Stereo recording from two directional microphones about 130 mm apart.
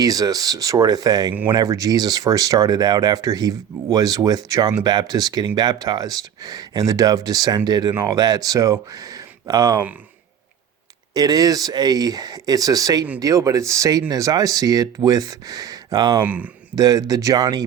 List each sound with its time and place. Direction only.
0.0 s speech: 30° right (ahead or behind)
11.1 s speech: 30° right (ahead or behind)
16.2 s speech: 10° right (ahead or behind)
16.7 s speech: 30° right (ahead or behind)